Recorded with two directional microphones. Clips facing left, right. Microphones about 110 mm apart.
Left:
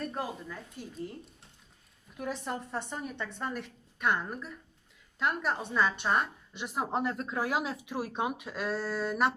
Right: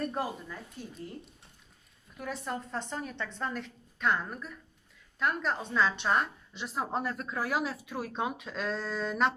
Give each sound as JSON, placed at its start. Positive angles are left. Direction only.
{"t": 0.1, "sound": "a woman's voice", "side_deg": -5}
{"t": 2.1, "sound": "speech", "side_deg": 20}